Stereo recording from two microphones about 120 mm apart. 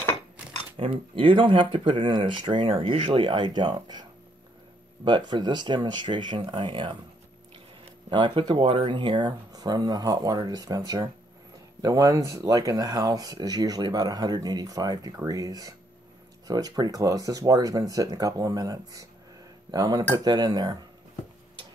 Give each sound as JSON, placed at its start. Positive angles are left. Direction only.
{"t": 0.7, "sound": "speech", "side_deg": -50}
{"t": 8.1, "sound": "speech", "side_deg": -40}